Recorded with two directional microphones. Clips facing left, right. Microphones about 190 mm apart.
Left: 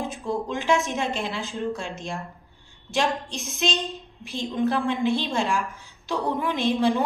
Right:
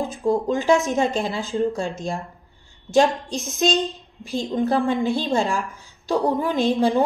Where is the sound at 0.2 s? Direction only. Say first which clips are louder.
Right 10 dB; 40° right (ahead or behind).